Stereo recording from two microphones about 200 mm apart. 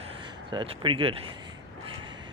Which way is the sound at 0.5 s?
25° right (ahead or behind).